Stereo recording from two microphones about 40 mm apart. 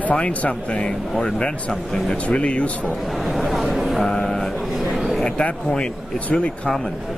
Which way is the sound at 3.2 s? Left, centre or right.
Centre.